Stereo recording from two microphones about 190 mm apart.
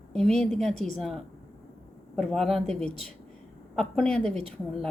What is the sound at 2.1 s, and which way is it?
Speech, 5° left (ahead or behind).